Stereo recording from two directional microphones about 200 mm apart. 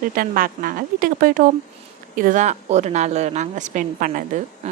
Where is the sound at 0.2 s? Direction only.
45° right (ahead or behind).